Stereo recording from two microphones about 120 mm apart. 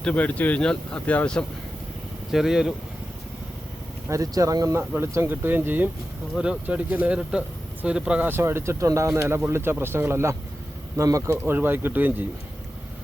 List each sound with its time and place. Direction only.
0.0 s speech: 10° left (ahead or behind)
2.3 s speech: 5° right (ahead or behind)
4.1 s speech: 30° right (ahead or behind)